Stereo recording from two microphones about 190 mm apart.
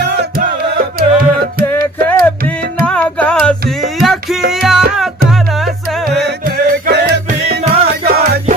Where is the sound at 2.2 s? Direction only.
10° left (ahead or behind).